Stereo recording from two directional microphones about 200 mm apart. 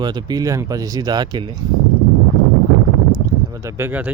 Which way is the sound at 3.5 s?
15° right (ahead or behind).